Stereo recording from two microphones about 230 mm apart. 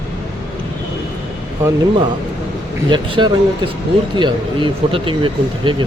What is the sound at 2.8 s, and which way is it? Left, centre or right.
Speech, centre.